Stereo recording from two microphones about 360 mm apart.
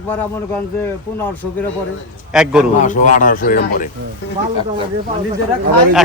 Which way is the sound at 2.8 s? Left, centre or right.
Left.